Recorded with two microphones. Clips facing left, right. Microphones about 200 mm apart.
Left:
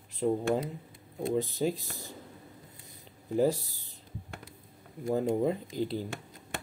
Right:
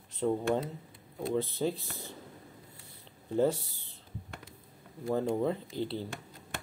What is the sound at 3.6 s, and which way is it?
Speech, 40° left (ahead or behind).